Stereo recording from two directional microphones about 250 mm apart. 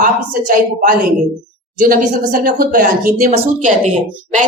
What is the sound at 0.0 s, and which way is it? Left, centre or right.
A woman's voice, right.